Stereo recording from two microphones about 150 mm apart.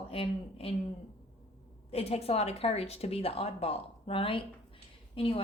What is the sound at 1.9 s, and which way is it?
Speech, 45° left (ahead or behind).